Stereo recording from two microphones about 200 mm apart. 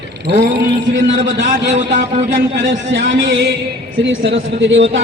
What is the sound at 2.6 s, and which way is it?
Speech, 60° right (ahead or behind).